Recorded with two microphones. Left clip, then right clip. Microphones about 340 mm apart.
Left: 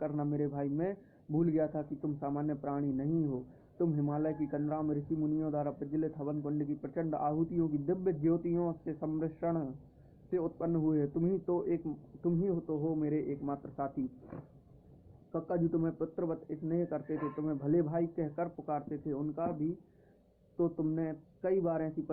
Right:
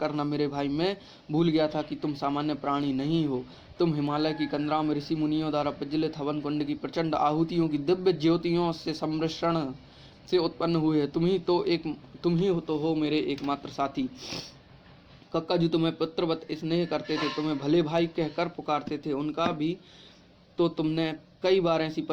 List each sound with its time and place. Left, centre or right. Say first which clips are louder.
0.0 s a man's voice: right 7 dB; right
20.6 s a man's voice: right 7 dB; right